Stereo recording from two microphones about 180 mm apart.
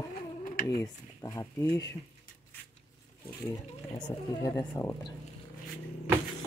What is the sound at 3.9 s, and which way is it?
Speech, 25° left (ahead or behind).